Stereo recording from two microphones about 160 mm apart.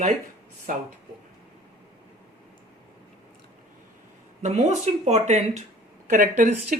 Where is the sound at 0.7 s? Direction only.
55° right (ahead or behind).